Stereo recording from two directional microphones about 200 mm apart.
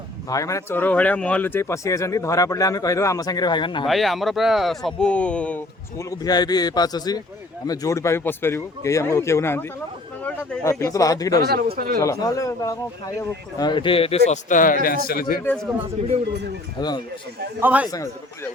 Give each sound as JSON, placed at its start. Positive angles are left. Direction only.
{"t": 0.3, "sound": "speech", "side_deg": 15}
{"t": 3.8, "sound": "speech", "side_deg": 0}
{"t": 11.3, "sound": "speech", "side_deg": -50}
{"t": 11.9, "sound": "speech", "side_deg": 15}
{"t": 14.3, "sound": "speech", "side_deg": 40}
{"t": 16.3, "sound": "speech", "side_deg": -60}
{"t": 16.7, "sound": "speech", "side_deg": 20}
{"t": 17.6, "sound": "a man's voice", "side_deg": -10}